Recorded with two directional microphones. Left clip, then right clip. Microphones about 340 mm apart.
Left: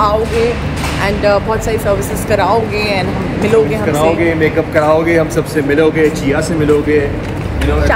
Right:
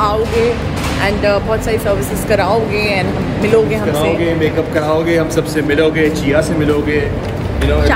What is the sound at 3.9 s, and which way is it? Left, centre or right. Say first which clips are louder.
Speech: left 3 dB; left.